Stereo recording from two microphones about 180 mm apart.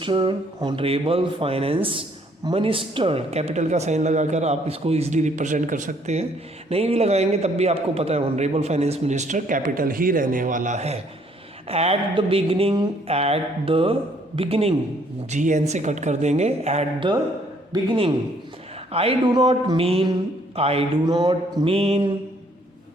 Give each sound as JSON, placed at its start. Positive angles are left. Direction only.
{"t": 0.0, "sound": "speech", "side_deg": -30}